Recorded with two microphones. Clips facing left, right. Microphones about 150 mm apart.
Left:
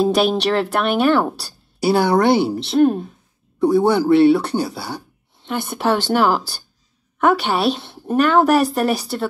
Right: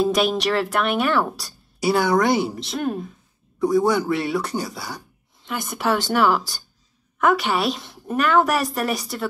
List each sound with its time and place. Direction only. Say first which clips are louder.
0.0 s speech: left 3 dB; 30° left (ahead or behind)